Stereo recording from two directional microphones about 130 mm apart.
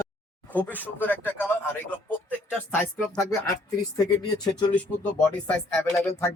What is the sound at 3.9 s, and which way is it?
Speech, 30° left (ahead or behind).